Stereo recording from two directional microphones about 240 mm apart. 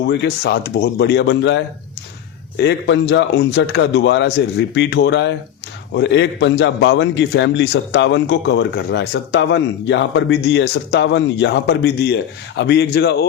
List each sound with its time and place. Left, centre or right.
0.1 s a man's voice: left